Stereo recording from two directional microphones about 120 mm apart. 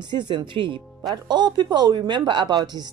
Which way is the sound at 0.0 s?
35° right (ahead or behind).